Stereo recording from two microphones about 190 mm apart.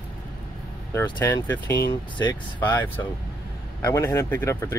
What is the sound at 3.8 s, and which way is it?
Speech, 15° left (ahead or behind).